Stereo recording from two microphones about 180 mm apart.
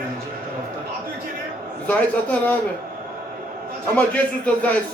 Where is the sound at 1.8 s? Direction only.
10° left (ahead or behind).